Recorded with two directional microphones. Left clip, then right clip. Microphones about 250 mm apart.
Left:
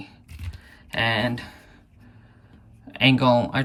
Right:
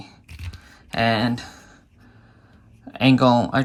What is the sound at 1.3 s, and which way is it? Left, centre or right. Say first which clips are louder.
Speech: right 3 dB; centre.